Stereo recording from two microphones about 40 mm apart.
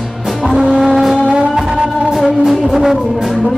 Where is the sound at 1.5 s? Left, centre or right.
Centre.